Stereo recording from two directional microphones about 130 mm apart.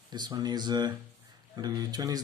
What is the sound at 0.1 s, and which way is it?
Speech, 30° right (ahead or behind).